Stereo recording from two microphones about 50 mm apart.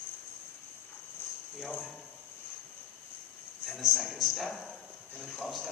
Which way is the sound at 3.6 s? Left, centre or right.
Centre.